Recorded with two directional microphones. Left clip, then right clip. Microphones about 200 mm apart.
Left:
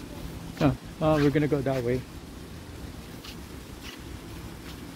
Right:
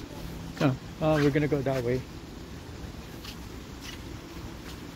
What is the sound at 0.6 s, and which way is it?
Speech, 20° left (ahead or behind).